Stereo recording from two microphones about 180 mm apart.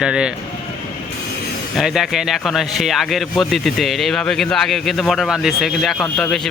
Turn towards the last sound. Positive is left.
turn(degrees=5)  # may be behind; listen again after turning